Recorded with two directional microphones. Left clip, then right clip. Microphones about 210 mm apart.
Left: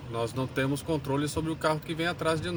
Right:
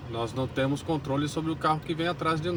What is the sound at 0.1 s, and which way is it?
Speech, 20° left (ahead or behind).